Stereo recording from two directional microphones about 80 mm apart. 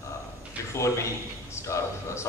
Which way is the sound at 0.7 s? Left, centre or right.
Left.